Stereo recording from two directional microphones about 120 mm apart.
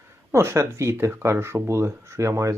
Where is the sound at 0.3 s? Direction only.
25° right (ahead or behind).